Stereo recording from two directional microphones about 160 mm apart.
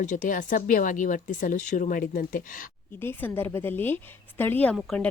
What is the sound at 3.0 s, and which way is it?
A woman's voice, 10° left (ahead or behind).